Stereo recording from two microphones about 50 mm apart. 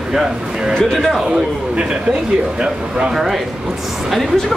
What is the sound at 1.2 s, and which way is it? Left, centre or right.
Speech, centre.